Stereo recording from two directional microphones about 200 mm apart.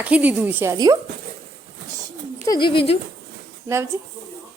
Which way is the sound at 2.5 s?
25° left (ahead or behind).